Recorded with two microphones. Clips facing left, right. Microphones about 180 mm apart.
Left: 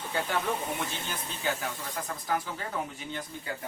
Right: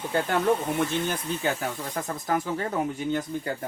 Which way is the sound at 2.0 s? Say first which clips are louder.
Right 4 dB; 45° right (ahead or behind).